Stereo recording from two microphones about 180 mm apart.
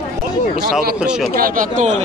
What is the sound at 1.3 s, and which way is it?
Speech, 50° right (ahead or behind).